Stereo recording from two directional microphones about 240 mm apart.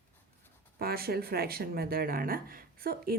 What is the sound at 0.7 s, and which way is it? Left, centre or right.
Speech, right.